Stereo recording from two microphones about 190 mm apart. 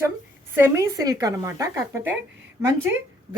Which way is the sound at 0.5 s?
15° right (ahead or behind).